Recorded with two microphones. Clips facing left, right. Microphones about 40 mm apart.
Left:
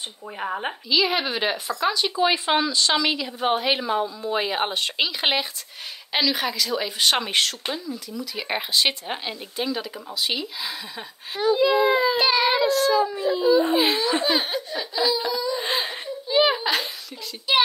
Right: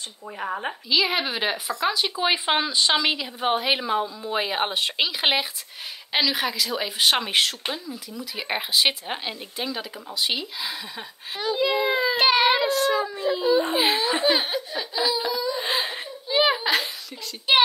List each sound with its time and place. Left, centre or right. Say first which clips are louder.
0.8 s speech: left 1 dB; centre
12.2 s a child's voice: right 1 dB; right
12.5 s speech: left 2 dB; centre
13.2 s a child's voice: left 2 dB; right
14.1 s laughter: even; centre